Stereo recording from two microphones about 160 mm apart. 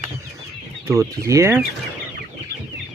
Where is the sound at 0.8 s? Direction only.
20° right (ahead or behind).